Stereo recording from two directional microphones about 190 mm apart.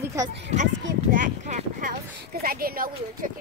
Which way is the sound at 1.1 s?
45° right (ahead or behind).